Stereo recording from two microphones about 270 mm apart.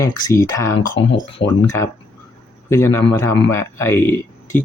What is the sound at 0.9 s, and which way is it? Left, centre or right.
Speech, left.